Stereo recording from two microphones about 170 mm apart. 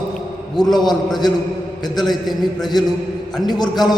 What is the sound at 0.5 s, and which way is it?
A man's voice, centre (ahead or behind).